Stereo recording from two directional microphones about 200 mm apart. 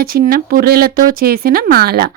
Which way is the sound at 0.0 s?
45° right (ahead or behind).